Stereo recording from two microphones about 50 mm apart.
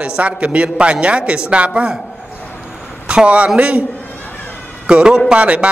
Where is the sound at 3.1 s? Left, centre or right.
Right.